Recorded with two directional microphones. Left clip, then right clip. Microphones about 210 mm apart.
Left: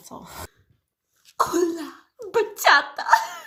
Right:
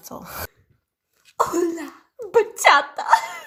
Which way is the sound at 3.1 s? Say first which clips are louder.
Right 1 dB; 50° right (ahead or behind).